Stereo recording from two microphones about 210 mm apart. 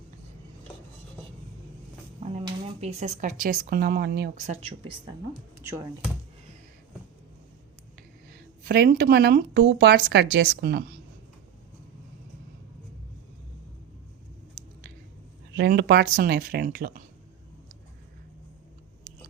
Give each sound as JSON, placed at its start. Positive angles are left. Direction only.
{"t": 2.2, "sound": "speech", "side_deg": -30}
{"t": 4.4, "sound": "speech", "side_deg": -30}
{"t": 5.5, "sound": "speech", "side_deg": -15}
{"t": 8.3, "sound": "speech", "side_deg": -45}
{"t": 15.5, "sound": "speech", "side_deg": -50}